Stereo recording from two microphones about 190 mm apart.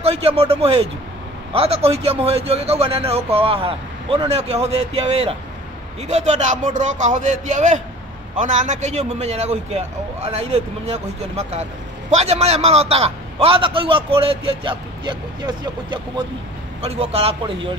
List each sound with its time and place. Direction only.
0.0 s a man's voice: 30° right (ahead or behind)
16.8 s a man's voice: 30° right (ahead or behind)